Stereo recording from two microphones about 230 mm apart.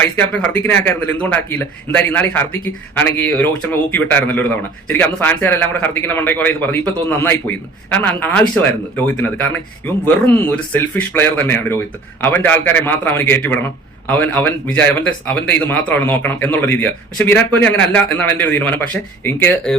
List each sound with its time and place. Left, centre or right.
0.0 s a man's voice: centre